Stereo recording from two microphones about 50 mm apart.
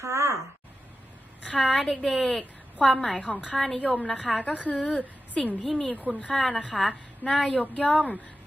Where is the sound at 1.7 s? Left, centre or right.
Centre.